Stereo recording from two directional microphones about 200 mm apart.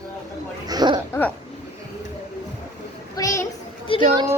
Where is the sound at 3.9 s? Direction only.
25° left (ahead or behind).